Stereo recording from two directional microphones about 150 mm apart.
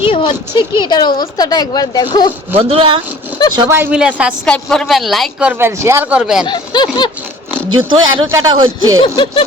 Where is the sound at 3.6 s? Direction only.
15° right (ahead or behind).